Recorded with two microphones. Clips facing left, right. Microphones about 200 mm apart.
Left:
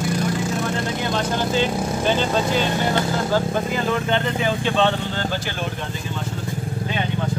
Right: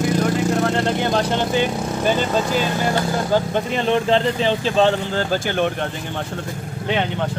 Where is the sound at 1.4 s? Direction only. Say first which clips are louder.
Right 1 dB; 15° right (ahead or behind).